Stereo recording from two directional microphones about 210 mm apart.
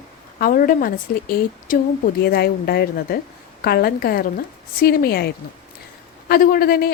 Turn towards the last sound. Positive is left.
turn(degrees=45)  # may be behind; listen again after turning